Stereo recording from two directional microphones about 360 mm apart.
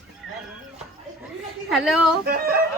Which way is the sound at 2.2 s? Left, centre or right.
Right.